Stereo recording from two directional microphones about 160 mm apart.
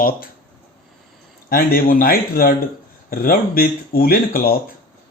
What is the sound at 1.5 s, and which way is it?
Speech, 65° left (ahead or behind).